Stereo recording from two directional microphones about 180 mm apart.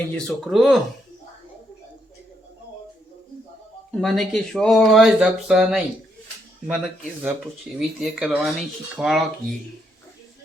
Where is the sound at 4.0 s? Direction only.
Centre (ahead or behind).